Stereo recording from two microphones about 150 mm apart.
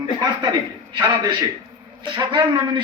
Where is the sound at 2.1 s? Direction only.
30° right (ahead or behind).